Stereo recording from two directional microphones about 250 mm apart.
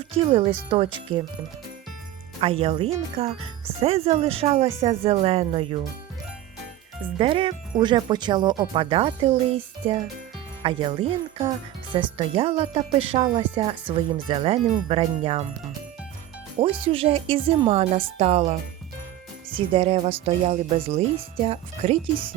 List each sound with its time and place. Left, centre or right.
0.0 s speech: right
2.4 s speech: right
7.2 s speech: right
16.6 s speech: right
19.5 s speech: right